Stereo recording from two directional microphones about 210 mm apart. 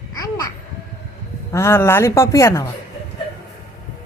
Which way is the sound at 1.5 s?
15° left (ahead or behind).